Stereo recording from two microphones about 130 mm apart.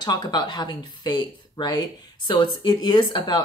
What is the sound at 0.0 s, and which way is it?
Speech, 30° left (ahead or behind).